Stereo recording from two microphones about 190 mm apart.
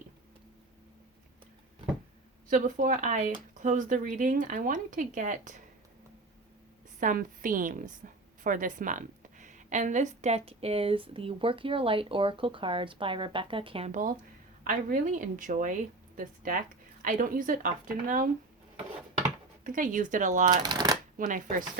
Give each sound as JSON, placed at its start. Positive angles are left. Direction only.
{"t": 2.5, "sound": "speech", "side_deg": -40}
{"t": 7.0, "sound": "a woman's voice", "side_deg": -45}
{"t": 13.9, "sound": "speech", "side_deg": -45}
{"t": 19.6, "sound": "speech", "side_deg": -45}
{"t": 20.6, "sound": "shuffling cards", "side_deg": -20}
{"t": 21.2, "sound": "speech", "side_deg": -45}